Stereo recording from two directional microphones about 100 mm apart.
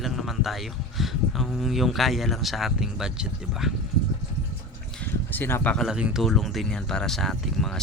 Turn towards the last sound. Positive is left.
turn(degrees=5)  # may be behind; listen again after turning